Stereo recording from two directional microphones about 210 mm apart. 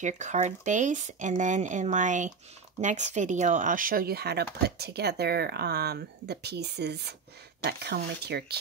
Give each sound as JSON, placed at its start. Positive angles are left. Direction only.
{"t": 0.0, "sound": "speech", "side_deg": -35}